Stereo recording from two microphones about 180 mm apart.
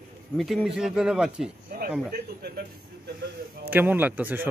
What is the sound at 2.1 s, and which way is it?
Speech, 60° right (ahead or behind).